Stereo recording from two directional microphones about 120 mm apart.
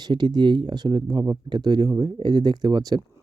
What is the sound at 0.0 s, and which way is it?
Speech, 35° right (ahead or behind).